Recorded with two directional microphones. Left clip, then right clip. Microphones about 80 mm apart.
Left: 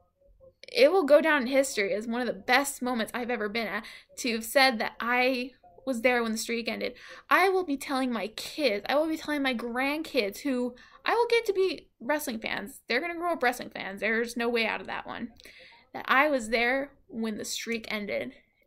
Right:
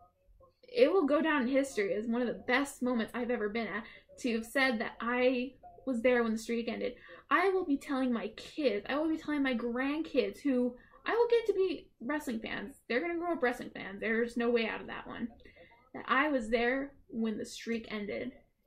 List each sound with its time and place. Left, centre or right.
0.7 s a woman's voice: left